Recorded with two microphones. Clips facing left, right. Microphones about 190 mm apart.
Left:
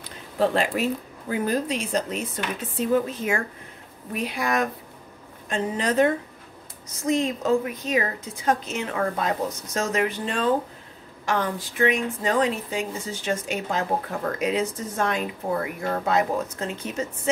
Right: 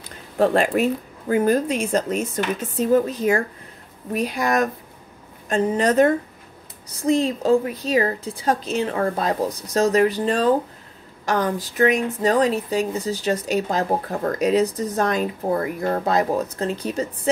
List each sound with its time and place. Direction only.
0.4 s speech: 50° right (ahead or behind)
6.9 s speech: 35° right (ahead or behind)